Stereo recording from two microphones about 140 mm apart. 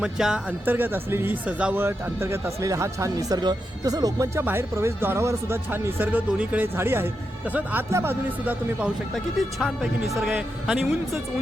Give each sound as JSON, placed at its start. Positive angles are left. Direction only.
{"t": 0.0, "sound": "speech", "side_deg": -5}
{"t": 9.1, "sound": "speech", "side_deg": 5}
{"t": 10.3, "sound": "speech", "side_deg": -10}